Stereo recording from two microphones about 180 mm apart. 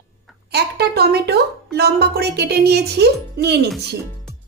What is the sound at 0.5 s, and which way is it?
Speech, 65° right (ahead or behind).